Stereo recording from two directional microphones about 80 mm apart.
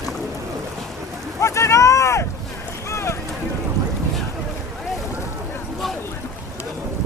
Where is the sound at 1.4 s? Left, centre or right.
Left.